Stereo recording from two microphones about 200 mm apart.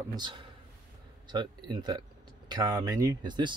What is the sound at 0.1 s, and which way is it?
Speech, 25° right (ahead or behind).